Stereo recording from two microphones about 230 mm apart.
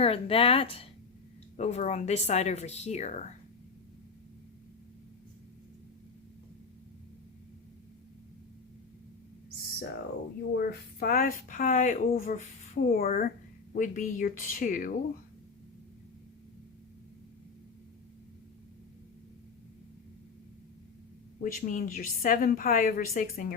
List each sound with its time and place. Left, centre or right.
0.0 s speech: left
10.5 s speech: left
21.4 s speech: left